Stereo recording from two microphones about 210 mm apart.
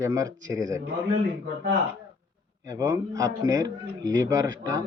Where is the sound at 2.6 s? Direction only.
15° right (ahead or behind).